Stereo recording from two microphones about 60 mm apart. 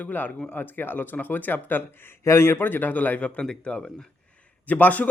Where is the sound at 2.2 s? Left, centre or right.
Left.